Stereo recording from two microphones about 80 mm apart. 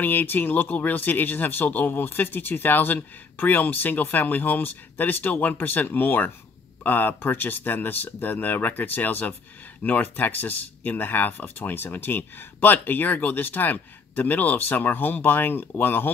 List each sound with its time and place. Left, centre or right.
0.0 s speech: left